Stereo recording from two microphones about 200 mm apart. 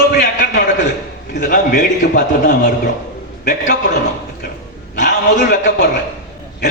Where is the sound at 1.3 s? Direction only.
45° left (ahead or behind).